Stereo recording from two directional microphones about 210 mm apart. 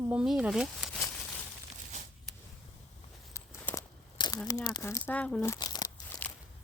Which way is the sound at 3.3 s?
15° left (ahead or behind).